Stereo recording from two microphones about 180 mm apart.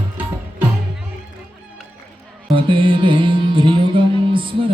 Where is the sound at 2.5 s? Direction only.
30° right (ahead or behind).